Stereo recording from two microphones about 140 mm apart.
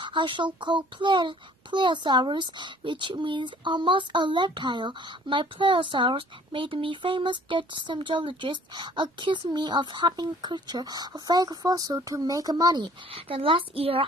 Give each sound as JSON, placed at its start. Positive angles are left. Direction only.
{"t": 0.0, "sound": "a child's voice", "side_deg": -35}